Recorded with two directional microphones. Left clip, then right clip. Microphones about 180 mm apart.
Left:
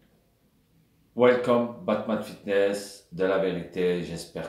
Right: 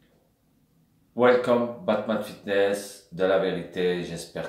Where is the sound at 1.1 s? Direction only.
Centre (ahead or behind).